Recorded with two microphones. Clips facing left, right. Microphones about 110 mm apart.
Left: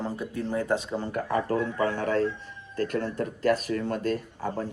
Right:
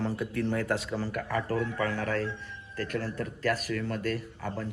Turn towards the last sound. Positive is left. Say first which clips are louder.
# left 4 dB
turn(degrees=30)  # may be behind; listen again after turning